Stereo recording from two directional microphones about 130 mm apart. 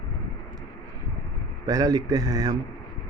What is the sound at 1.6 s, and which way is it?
Speech, 30° right (ahead or behind).